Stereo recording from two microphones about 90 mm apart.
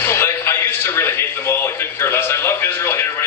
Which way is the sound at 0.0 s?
25° left (ahead or behind).